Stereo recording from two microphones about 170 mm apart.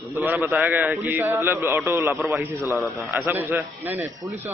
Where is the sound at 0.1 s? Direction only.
10° right (ahead or behind).